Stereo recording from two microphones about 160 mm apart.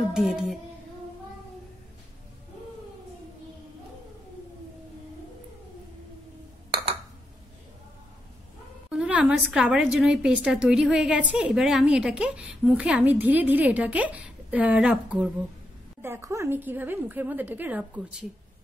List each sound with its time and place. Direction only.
0.1 s music: 5° right (ahead or behind)
8.9 s a woman's voice: 5° right (ahead or behind)